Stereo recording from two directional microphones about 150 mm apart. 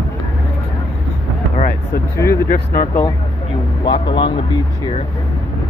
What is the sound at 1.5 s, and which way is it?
Vehicle, 60° left (ahead or behind).